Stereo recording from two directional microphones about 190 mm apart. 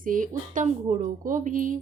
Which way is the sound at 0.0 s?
45° right (ahead or behind).